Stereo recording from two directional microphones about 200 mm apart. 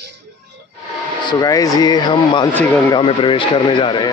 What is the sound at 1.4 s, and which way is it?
Speech, 20° left (ahead or behind).